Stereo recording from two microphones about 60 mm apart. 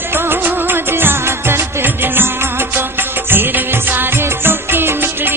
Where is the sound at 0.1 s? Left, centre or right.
Right.